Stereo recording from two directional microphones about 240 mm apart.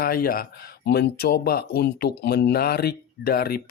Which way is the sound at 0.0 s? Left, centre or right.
Left.